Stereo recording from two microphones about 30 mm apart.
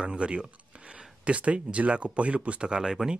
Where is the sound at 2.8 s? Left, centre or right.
Centre.